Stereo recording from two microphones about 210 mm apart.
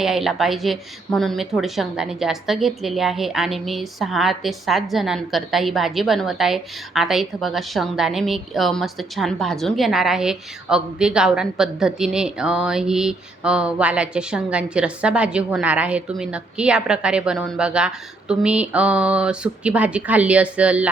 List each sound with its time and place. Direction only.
0.0 s a woman's voice: centre (ahead or behind)